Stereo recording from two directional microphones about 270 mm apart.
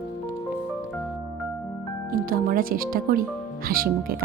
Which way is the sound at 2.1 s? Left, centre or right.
Right.